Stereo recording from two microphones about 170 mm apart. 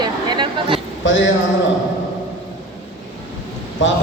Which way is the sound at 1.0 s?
90° left.